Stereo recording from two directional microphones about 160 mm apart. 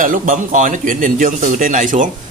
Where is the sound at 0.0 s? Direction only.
55° right (ahead or behind).